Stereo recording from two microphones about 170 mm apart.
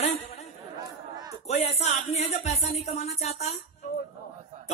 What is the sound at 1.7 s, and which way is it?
A woman's voice, 40° left (ahead or behind).